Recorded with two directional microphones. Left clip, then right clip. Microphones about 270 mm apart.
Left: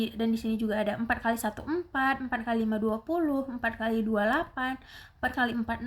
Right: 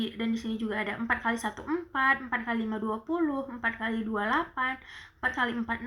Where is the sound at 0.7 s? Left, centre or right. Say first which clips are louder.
Even; left.